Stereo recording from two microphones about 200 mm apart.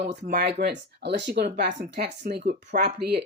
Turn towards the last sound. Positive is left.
turn(degrees=-55)  # may be behind; listen again after turning